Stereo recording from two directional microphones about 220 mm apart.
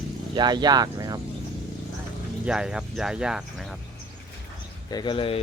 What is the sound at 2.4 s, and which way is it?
Speech, 5° right (ahead or behind).